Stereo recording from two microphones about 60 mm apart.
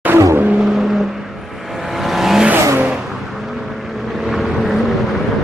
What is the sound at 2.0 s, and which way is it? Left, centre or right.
Vehicle, centre.